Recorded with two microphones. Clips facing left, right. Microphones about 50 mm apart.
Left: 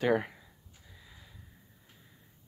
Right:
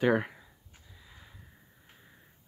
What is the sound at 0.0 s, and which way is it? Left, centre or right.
Speech, centre.